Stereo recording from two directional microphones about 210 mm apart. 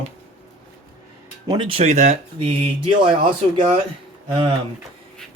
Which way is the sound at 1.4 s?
25° right (ahead or behind).